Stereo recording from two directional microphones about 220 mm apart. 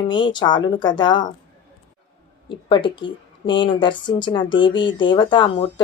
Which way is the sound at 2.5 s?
20° left (ahead or behind).